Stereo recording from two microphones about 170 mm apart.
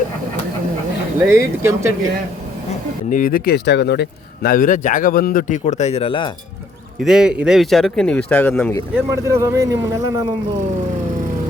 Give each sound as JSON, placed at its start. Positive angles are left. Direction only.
{"t": 1.2, "sound": "speech", "side_deg": -15}
{"t": 3.1, "sound": "speech", "side_deg": 50}
{"t": 5.6, "sound": "speech", "side_deg": 40}
{"t": 7.0, "sound": "speech", "side_deg": -5}
{"t": 9.0, "sound": "speech", "side_deg": -15}